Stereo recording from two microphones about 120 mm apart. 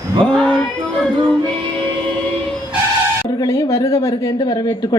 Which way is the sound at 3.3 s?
25° left (ahead or behind).